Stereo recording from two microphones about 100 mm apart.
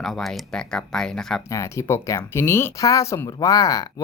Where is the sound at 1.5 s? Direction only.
30° left (ahead or behind).